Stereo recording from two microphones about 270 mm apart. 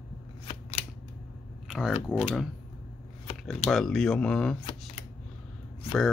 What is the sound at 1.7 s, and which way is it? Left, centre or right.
Speech, centre.